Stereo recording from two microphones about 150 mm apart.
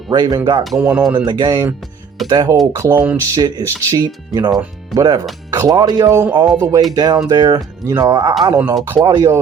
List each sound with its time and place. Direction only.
0.1 s speech: 30° right (ahead or behind)
0.6 s speech: centre (ahead or behind)
1.1 s speech: 30° right (ahead or behind)